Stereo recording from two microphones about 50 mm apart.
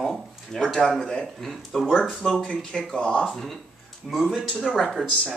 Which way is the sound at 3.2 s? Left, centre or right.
Centre.